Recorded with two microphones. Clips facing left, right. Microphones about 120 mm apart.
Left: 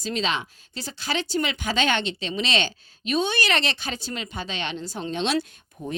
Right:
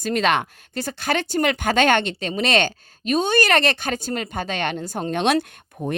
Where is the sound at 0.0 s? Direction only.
55° right (ahead or behind).